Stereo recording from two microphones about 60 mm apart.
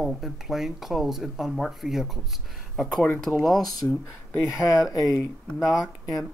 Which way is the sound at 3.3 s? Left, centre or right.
Centre.